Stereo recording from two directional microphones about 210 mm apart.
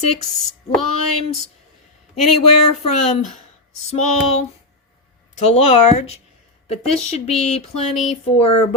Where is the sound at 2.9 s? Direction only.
30° left (ahead or behind).